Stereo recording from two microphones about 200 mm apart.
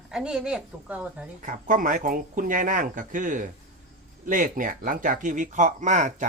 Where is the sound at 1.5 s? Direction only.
40° right (ahead or behind).